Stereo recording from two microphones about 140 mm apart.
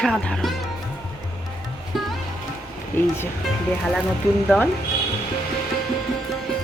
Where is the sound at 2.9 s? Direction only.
15° left (ahead or behind).